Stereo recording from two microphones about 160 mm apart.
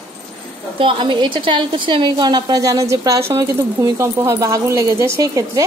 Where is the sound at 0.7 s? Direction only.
30° right (ahead or behind).